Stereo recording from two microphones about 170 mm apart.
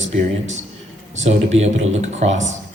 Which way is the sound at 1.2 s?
40° right (ahead or behind).